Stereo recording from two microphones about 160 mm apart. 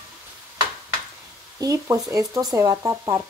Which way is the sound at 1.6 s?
20° right (ahead or behind).